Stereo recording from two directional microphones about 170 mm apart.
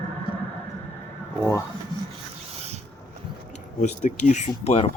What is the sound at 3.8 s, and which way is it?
Speech, 45° left (ahead or behind).